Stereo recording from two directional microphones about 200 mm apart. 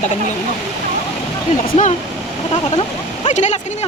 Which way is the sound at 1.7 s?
30° left (ahead or behind).